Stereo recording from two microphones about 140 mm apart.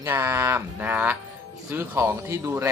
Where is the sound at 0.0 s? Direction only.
20° right (ahead or behind).